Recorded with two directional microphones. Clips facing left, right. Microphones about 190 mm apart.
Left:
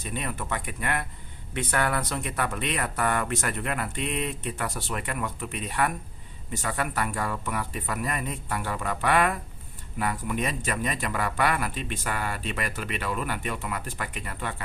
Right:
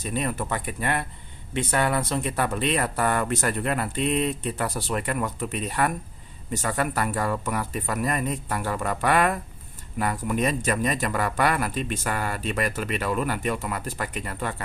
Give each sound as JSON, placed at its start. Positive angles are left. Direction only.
{"t": 0.1, "sound": "a man's voice", "side_deg": -40}